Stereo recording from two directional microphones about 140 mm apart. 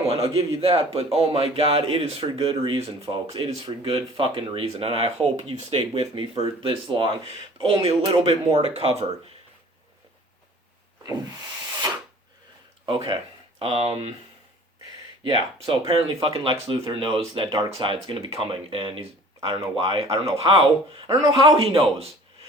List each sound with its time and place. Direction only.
0.0 s speech: 45° right (ahead or behind)
12.8 s speech: 35° right (ahead or behind)
15.2 s speech: 35° right (ahead or behind)